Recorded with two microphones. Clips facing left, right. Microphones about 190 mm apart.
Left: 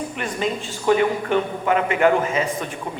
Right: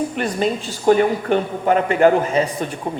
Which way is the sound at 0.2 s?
35° right (ahead or behind).